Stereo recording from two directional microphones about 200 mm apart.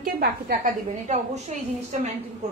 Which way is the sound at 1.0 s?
35° right (ahead or behind).